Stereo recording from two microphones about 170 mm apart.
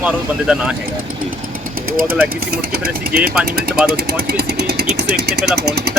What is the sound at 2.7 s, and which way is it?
Speech, 60° right (ahead or behind).